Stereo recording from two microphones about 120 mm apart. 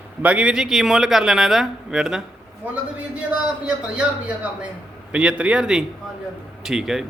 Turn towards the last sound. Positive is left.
turn(degrees=-5)  # may be behind; listen again after turning